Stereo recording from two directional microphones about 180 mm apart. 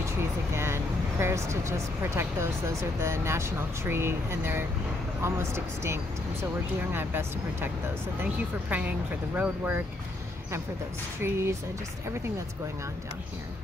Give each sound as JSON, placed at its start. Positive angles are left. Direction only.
{"t": 0.6, "sound": "a sound", "side_deg": -15}
{"t": 3.0, "sound": "speech", "side_deg": -15}
{"t": 11.1, "sound": "speech", "side_deg": -15}